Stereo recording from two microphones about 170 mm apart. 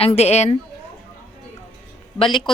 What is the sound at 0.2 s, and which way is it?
Speech, 40° left (ahead or behind).